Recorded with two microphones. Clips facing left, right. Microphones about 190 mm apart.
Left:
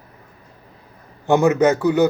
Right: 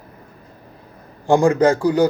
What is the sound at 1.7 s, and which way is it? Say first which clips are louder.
Speech: even; 25° left (ahead or behind).